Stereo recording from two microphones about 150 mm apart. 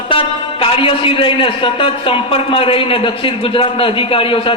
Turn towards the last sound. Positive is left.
turn(degrees=35)  # may be behind; listen again after turning